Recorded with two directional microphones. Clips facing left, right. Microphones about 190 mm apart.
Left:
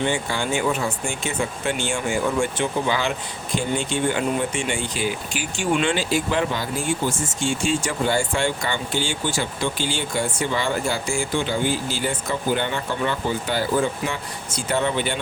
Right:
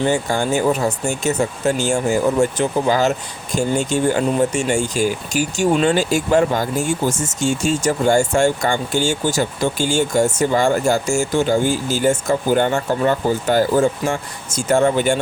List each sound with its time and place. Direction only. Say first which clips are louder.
0.0 s speech: right 5 dB; 45° right (ahead or behind)